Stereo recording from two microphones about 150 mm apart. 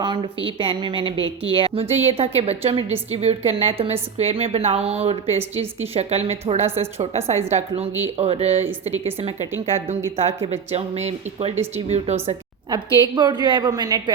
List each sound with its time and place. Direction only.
0.0 s a woman's voice: 35° right (ahead or behind)
8.2 s speech: 45° right (ahead or behind)
10.2 s speech: 45° right (ahead or behind)
12.7 s a woman's voice: 30° right (ahead or behind)